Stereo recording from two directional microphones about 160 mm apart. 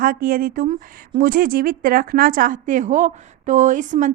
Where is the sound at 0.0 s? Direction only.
60° right (ahead or behind).